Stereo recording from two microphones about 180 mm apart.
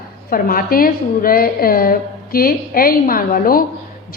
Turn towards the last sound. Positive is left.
turn(degrees=55)  # may be behind; listen again after turning